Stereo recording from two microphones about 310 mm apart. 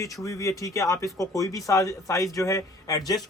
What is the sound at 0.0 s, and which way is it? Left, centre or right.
Speech, centre.